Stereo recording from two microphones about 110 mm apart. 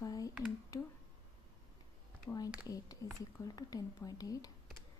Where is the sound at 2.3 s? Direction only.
25° left (ahead or behind).